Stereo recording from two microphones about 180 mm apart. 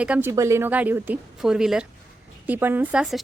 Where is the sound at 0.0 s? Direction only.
10° right (ahead or behind).